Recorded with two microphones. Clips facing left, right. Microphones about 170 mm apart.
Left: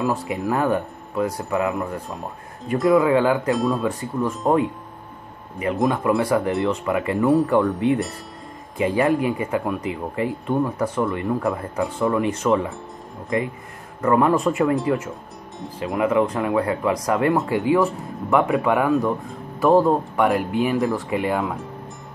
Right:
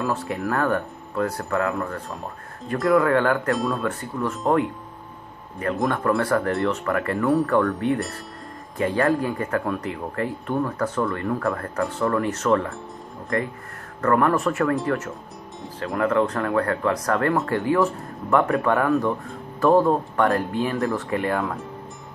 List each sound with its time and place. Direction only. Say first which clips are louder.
0.0 s speech: left 2 dB; 15° left (ahead or behind)
3.5 s speech: left 3 dB; centre (ahead or behind)
3.8 s speech: left 3 dB; 15° left (ahead or behind)
5.9 s speech: left 2 dB; 20° left (ahead or behind)
15.8 s speech: left 2 dB; 15° left (ahead or behind)